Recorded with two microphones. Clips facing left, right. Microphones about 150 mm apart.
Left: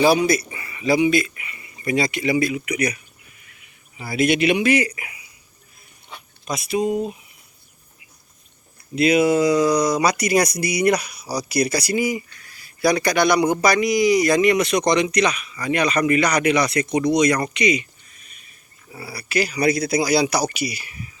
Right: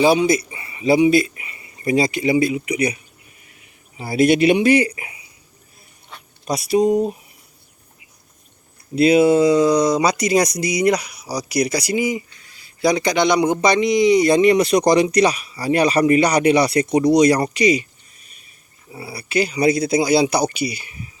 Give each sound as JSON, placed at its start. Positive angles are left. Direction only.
{"t": 0.0, "sound": "speech", "side_deg": -25}
{"t": 6.4, "sound": "speech", "side_deg": -35}
{"t": 9.0, "sound": "speech", "side_deg": -30}
{"t": 18.9, "sound": "speech", "side_deg": -20}